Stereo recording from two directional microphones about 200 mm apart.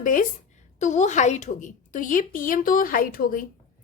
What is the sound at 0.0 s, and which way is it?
A woman's voice, 40° left (ahead or behind).